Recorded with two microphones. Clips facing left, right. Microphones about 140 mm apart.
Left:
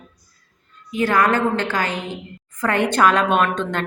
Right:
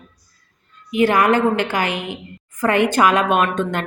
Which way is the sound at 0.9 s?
15° right (ahead or behind).